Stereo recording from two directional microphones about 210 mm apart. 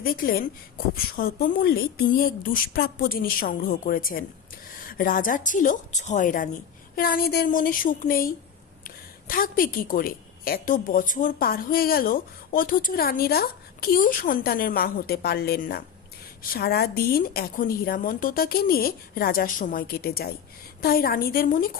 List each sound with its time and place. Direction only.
0.0 s a woman's voice: 45° left (ahead or behind)